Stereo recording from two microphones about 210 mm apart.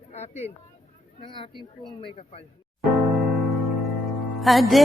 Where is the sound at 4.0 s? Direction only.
Centre (ahead or behind).